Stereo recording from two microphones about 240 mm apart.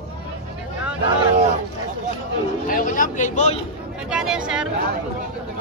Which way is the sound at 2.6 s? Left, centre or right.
Left.